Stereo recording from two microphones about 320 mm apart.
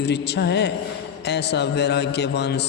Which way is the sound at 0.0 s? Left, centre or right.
Left.